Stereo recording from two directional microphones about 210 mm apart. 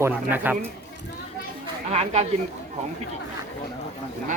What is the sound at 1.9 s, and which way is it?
Speech, 30° right (ahead or behind).